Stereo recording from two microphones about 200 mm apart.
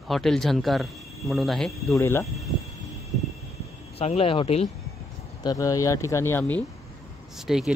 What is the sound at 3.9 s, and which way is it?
Speech, 30° left (ahead or behind).